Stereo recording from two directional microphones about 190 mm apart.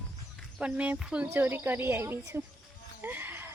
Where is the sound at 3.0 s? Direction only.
10° right (ahead or behind).